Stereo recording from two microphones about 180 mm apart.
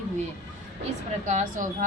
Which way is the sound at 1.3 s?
45° right (ahead or behind).